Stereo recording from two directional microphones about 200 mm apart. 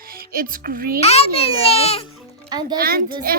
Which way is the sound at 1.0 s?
30° left (ahead or behind).